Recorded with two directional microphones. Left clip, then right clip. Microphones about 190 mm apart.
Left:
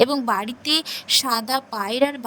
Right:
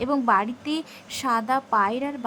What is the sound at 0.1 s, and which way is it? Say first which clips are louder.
Speech: right 2 dB; centre (ahead or behind).